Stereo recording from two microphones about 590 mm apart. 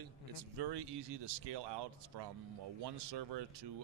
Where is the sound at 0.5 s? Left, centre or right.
Right.